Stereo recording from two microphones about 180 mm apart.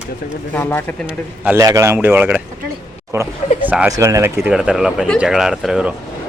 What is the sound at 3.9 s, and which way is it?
Speech, 15° right (ahead or behind).